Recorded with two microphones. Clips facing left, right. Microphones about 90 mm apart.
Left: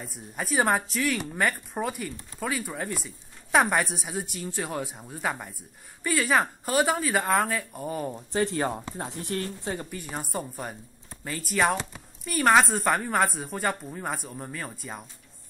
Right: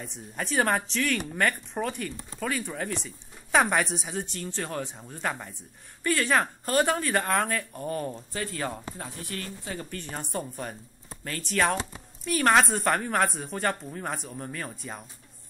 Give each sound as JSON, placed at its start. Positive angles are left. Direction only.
{"t": 0.0, "sound": "a woman's voice", "side_deg": 5}
{"t": 8.3, "sound": "speech", "side_deg": 25}
{"t": 9.8, "sound": "a woman's voice", "side_deg": 10}